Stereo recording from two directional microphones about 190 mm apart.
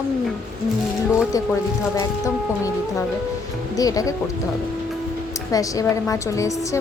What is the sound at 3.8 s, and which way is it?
Speech, 20° left (ahead or behind).